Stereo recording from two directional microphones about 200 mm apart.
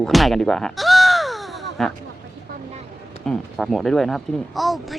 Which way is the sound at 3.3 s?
Centre (ahead or behind).